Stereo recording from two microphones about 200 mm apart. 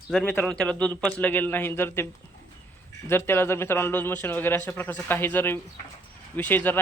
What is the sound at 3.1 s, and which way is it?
Speech, 10° left (ahead or behind).